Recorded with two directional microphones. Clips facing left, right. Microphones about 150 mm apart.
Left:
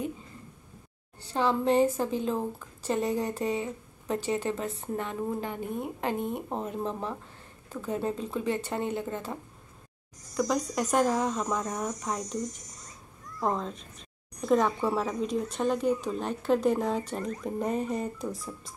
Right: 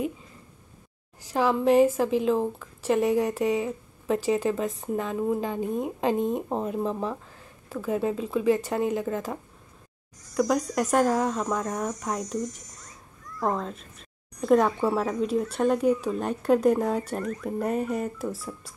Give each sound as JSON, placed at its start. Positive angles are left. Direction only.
{"t": 1.2, "sound": "speech", "side_deg": -10}
{"t": 1.6, "sound": "a woman's voice", "side_deg": 30}
{"t": 2.0, "sound": "speech", "side_deg": -90}
{"t": 2.9, "sound": "speech", "side_deg": -10}
{"t": 3.2, "sound": "speech", "side_deg": -75}
{"t": 4.4, "sound": "speech", "side_deg": -15}
{"t": 6.8, "sound": "speech", "side_deg": -5}
{"t": 10.3, "sound": "speech", "side_deg": -5}
{"t": 13.4, "sound": "speech", "side_deg": 0}
{"t": 17.2, "sound": "a woman's voice", "side_deg": 30}
{"t": 17.5, "sound": "speech", "side_deg": -5}